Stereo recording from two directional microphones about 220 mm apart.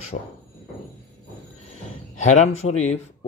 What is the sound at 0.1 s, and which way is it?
Speech, 40° left (ahead or behind).